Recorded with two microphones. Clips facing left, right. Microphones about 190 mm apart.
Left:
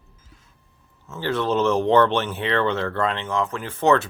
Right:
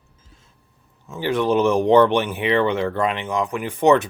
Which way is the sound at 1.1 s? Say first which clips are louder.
Right 3 dB; 15° right (ahead or behind).